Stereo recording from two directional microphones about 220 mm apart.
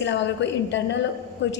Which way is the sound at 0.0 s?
55° left (ahead or behind).